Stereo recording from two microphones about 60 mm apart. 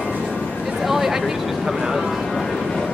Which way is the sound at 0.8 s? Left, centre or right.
Centre.